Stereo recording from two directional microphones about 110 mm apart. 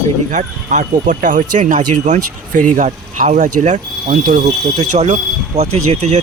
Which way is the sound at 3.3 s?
90° right.